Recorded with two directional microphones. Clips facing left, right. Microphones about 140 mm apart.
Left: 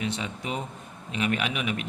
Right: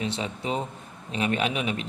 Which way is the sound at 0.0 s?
30° right (ahead or behind).